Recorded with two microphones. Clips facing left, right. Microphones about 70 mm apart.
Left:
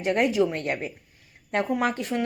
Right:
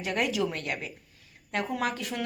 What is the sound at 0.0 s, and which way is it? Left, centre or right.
A woman's voice, left.